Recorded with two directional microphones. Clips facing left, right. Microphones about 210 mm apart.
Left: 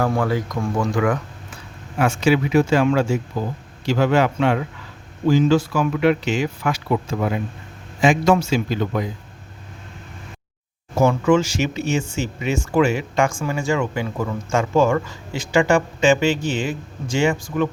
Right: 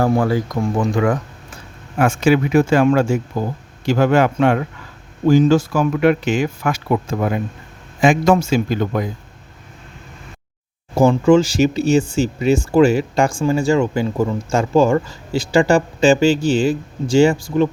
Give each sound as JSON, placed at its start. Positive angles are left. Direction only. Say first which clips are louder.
{"t": 0.2, "sound": "speech", "louder": "right 4 dB", "side_deg": -30}
{"t": 2.0, "sound": "speech", "louder": "right 3 dB", "side_deg": -50}
{"t": 10.9, "sound": "speech", "louder": "right 4 dB", "side_deg": -30}